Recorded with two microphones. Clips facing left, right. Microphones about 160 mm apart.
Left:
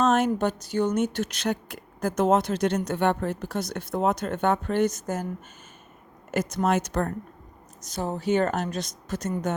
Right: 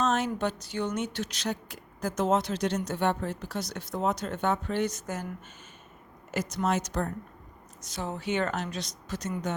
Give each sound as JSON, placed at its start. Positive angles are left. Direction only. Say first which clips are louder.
{"t": 0.0, "sound": "speech", "louder": "left 5 dB", "side_deg": 55}
{"t": 6.3, "sound": "speech", "louder": "left 4 dB", "side_deg": 50}
{"t": 7.9, "sound": "speech", "louder": "left 6 dB", "side_deg": 40}